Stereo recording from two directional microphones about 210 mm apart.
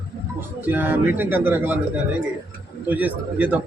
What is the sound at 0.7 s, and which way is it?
Speech, 10° right (ahead or behind).